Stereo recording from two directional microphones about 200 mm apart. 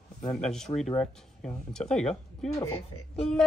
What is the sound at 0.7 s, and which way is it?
Speech, 20° left (ahead or behind).